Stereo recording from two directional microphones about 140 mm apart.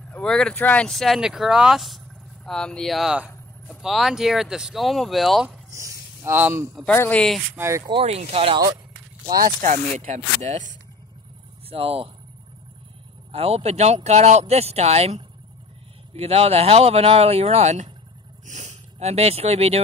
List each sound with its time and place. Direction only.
0.1 s speech: 5° left (ahead or behind)
5.7 s speech: 20° right (ahead or behind)
6.9 s speech: 10° left (ahead or behind)
7.5 s speech: 20° right (ahead or behind)
7.9 s speech: 45° right (ahead or behind)
9.4 s speech: 65° right (ahead or behind)
11.7 s speech: 40° right (ahead or behind)
13.3 s speech: 45° right (ahead or behind)